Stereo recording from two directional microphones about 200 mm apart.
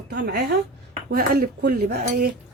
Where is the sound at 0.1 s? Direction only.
55° right (ahead or behind).